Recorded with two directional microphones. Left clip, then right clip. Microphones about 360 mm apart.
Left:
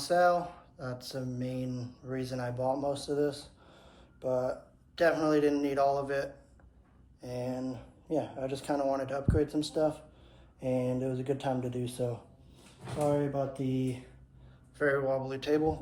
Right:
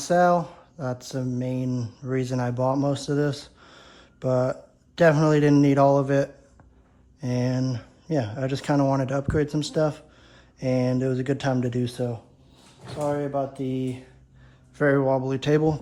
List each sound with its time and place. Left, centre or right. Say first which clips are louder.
0.0 s a sound: right 6 dB; centre
4.9 s speech: right 7 dB; centre
7.3 s speech: right 8 dB; right